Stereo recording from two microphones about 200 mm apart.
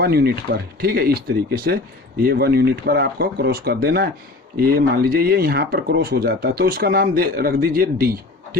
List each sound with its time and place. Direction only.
0.0 s speech: 50° right (ahead or behind)